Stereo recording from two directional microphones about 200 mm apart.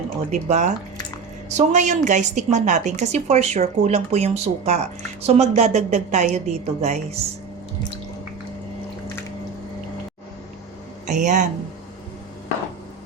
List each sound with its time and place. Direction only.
0.3 s a woman's voice: 40° right (ahead or behind)
11.1 s a woman's voice: 40° right (ahead or behind)